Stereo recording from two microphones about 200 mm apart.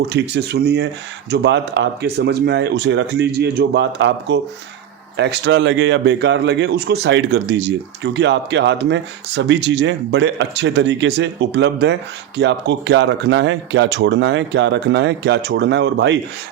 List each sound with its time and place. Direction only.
0.0 s speech: 55° right (ahead or behind)